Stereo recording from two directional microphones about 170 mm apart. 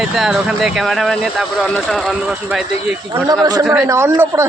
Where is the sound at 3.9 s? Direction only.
15° right (ahead or behind).